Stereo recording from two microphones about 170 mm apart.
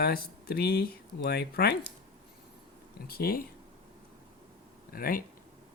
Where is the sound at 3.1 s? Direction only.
60° left (ahead or behind).